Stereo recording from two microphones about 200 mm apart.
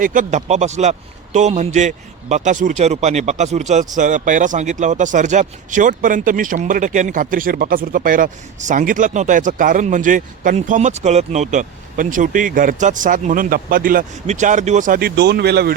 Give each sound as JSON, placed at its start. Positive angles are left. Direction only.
{"t": 0.0, "sound": "speech", "side_deg": -40}